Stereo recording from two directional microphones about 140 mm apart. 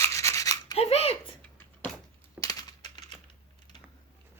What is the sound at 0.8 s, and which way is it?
Speech, 45° left (ahead or behind).